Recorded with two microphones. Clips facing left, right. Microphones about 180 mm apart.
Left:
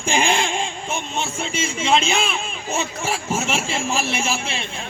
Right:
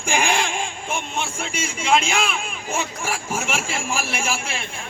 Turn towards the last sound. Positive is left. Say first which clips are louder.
# left 2 dB
turn(degrees=20)  # may be behind; listen again after turning